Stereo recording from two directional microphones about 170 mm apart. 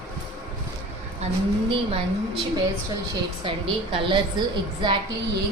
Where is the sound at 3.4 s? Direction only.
30° right (ahead or behind).